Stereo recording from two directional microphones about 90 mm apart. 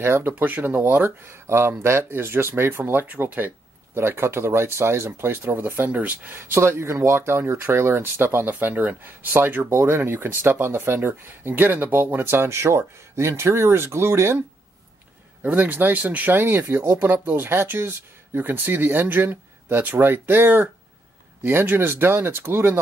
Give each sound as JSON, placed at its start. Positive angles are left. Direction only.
{"t": 0.0, "sound": "speech", "side_deg": -25}
{"t": 15.4, "sound": "speech", "side_deg": -20}